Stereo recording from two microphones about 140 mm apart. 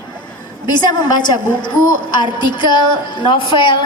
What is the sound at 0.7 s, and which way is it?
A woman's voice, 30° left (ahead or behind).